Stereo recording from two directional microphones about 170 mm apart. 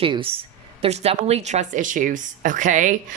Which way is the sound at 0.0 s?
30° right (ahead or behind).